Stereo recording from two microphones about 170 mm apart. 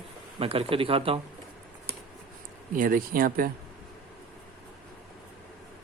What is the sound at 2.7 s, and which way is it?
Speech, 55° right (ahead or behind).